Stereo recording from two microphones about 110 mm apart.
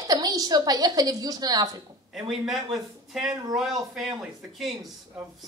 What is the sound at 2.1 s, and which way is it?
Speech, 5° right (ahead or behind).